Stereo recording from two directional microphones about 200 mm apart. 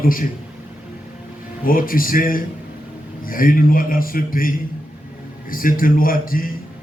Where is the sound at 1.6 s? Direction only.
45° left (ahead or behind).